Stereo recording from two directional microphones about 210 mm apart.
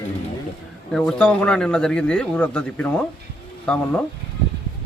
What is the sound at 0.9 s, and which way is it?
A man's voice, 5° left (ahead or behind).